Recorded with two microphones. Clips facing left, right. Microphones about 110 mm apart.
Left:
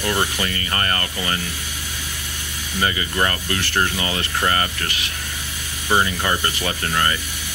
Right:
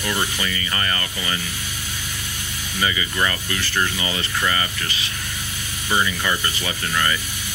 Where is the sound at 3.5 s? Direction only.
65° left (ahead or behind).